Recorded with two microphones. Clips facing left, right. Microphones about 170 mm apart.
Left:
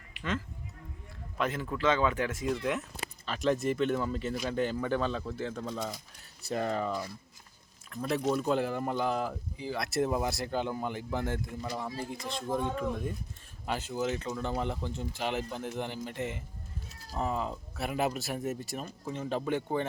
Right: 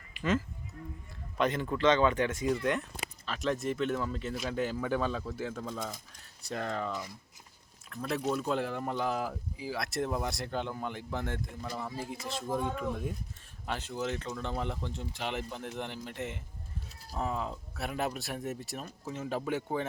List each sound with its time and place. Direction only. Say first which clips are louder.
0.1 s a sound: right 5 dB; 75° left (ahead or behind)
1.4 s speech: right 3 dB; 5° left (ahead or behind)
8.0 s speech: left 3 dB; centre (ahead or behind)